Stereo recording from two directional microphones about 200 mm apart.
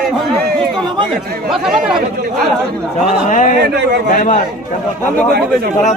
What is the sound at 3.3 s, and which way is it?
A man's voice, 40° left (ahead or behind).